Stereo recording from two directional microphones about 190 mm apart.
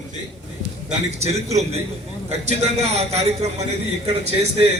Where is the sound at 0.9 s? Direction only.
35° right (ahead or behind).